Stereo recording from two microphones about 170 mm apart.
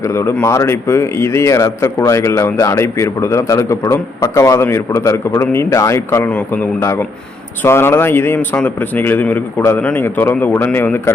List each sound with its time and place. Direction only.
0.0 s a man's voice: 15° left (ahead or behind)